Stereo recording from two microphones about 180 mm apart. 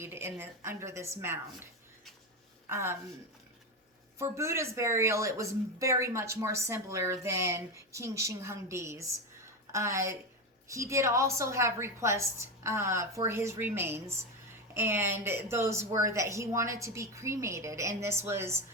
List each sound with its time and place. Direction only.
0.0 s a woman's voice: 15° right (ahead or behind)
2.6 s a woman's voice: 15° right (ahead or behind)
4.2 s speech: 15° right (ahead or behind)